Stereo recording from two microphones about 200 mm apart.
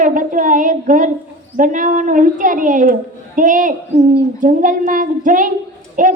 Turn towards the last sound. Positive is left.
turn(degrees=-40)  # may be behind; listen again after turning